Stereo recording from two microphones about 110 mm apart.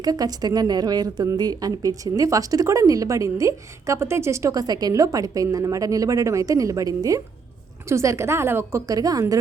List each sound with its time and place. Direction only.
0.0 s a woman's voice: 35° right (ahead or behind)